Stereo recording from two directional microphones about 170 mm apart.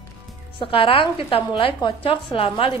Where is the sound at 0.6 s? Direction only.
30° left (ahead or behind).